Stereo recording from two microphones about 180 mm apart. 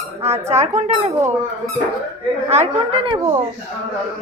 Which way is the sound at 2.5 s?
35° right (ahead or behind).